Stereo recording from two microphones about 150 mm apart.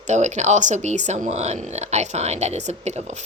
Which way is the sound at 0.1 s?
50° right (ahead or behind).